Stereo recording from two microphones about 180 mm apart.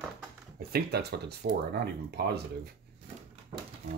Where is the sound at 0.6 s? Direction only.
60° right (ahead or behind).